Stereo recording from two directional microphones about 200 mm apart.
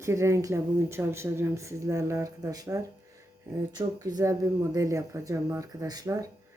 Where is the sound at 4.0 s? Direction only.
15° right (ahead or behind).